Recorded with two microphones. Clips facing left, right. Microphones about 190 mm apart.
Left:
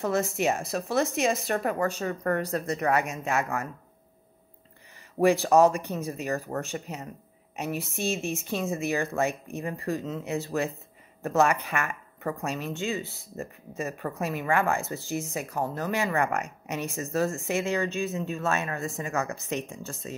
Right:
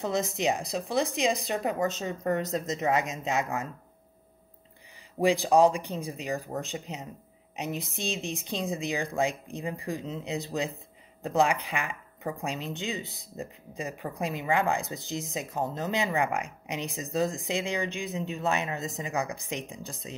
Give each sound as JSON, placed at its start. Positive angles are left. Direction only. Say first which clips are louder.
{"t": 0.0, "sound": "speech", "louder": "left 2 dB", "side_deg": -15}
{"t": 5.2, "sound": "speech", "louder": "left 2 dB", "side_deg": -15}